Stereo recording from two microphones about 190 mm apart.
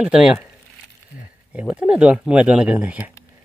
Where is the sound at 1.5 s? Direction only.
5° right (ahead or behind).